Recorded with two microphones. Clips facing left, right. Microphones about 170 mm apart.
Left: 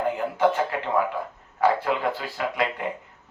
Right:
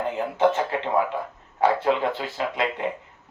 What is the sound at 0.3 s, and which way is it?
Speech, 25° right (ahead or behind).